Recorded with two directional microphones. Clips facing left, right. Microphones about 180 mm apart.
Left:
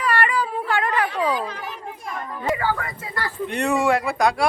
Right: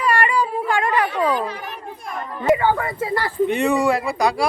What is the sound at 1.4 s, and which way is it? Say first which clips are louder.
Children playing: right 3 dB; 60° right (ahead or behind).